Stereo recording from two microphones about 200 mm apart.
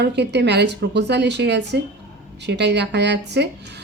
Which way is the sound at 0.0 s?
60° right (ahead or behind).